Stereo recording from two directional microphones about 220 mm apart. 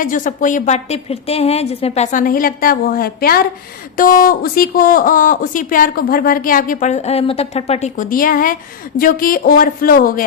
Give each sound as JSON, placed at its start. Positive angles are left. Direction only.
{"t": 0.0, "sound": "speech", "side_deg": 35}